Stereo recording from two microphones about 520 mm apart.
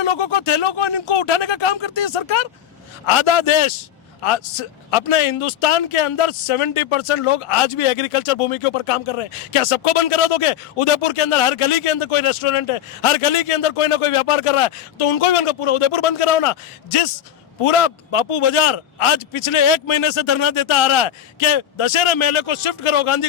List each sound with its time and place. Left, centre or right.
0.0 s speech: left
17.6 s speech: left